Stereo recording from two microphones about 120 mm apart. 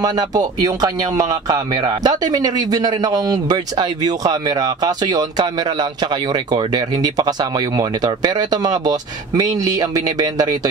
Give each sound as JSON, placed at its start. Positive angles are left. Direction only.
{"t": 0.0, "sound": "speech", "side_deg": -35}